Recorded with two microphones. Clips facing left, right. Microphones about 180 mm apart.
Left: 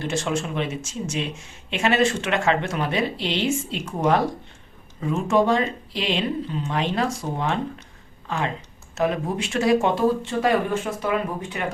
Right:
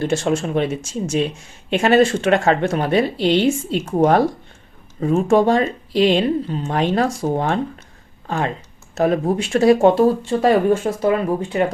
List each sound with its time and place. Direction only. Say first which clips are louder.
0.3 s speech: right 6 dB; 45° right (ahead or behind)
9.0 s speech: right 6 dB; 35° right (ahead or behind)